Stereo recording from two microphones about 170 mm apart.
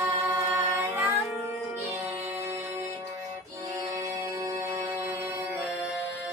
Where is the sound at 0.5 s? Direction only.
10° right (ahead or behind).